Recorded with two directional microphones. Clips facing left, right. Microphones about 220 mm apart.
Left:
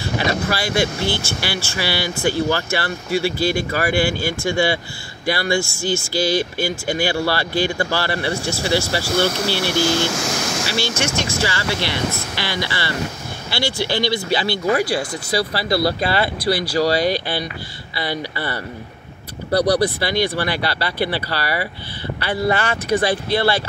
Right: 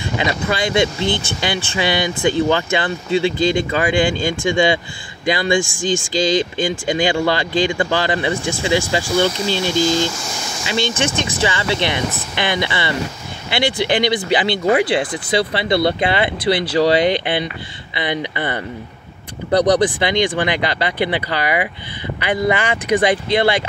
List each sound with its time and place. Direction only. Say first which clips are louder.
0.5 s speech: right 3 dB; 20° right (ahead or behind)
10.0 s speech: left 3 dB; 80° left
10.7 s speech: right 6 dB; 20° right (ahead or behind)